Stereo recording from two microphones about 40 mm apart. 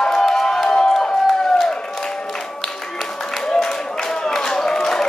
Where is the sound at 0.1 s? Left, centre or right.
Centre.